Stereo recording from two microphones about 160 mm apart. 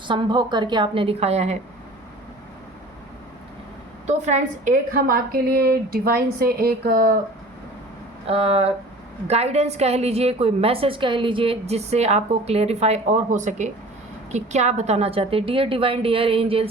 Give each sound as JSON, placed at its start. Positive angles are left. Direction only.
{"t": 0.1, "sound": "a woman's voice", "side_deg": -30}
{"t": 4.0, "sound": "a woman's voice", "side_deg": -45}
{"t": 8.3, "sound": "a woman's voice", "side_deg": -40}